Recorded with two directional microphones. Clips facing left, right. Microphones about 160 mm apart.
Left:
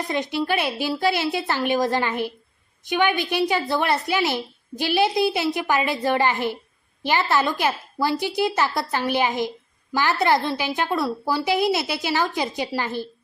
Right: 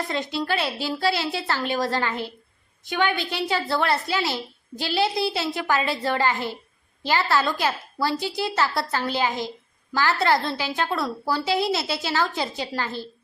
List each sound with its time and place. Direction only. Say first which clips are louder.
0.1 s a woman's voice: left 6 dB; 15° left (ahead or behind)